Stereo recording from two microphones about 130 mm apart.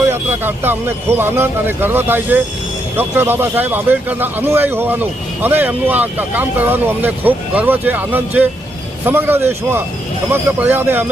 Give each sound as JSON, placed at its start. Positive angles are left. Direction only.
{"t": 0.0, "sound": "speech", "side_deg": -15}